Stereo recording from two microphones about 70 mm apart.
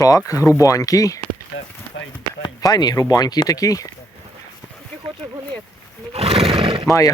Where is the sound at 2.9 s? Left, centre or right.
Left.